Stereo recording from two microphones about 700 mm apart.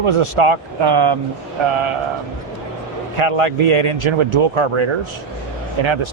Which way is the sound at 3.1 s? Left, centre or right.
Right.